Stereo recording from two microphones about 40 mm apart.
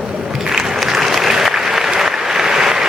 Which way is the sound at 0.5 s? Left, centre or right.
Centre.